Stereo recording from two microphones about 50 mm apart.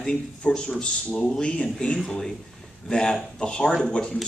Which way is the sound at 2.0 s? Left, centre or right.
Centre.